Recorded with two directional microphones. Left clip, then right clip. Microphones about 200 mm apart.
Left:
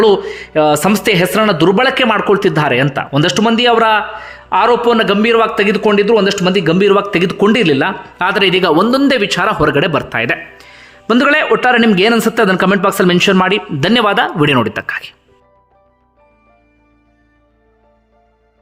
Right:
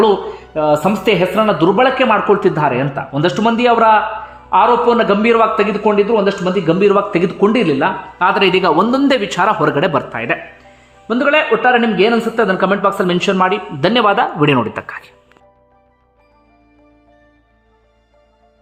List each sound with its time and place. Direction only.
0.0 s speech: 10° left (ahead or behind)
11.0 s a man's voice: 25° left (ahead or behind); by 15.1 s 5° left (ahead or behind)